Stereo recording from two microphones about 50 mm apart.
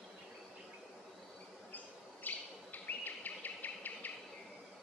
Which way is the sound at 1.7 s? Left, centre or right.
Left.